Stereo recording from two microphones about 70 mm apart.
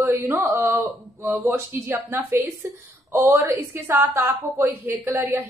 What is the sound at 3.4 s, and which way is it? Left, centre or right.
A woman's voice, right.